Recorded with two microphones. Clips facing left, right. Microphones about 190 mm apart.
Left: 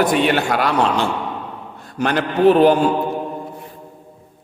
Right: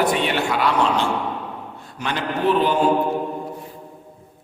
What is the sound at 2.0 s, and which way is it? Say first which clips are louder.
Speech: left 7 dB; 50° left (ahead or behind).